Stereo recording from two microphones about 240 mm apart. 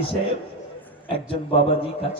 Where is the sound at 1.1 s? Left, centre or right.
Left.